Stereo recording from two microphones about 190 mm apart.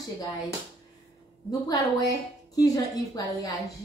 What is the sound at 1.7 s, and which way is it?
A woman's voice, 20° left (ahead or behind).